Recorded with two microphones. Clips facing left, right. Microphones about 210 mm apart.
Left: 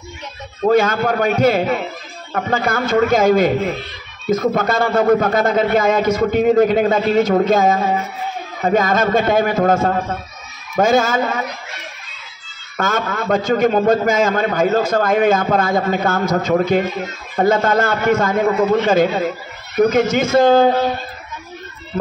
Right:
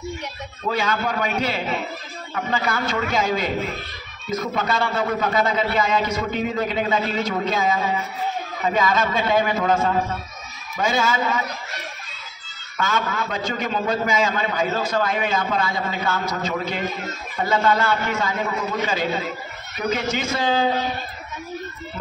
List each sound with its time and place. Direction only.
0.7 s a man's voice: 50° left (ahead or behind)
12.7 s a man's voice: 45° left (ahead or behind)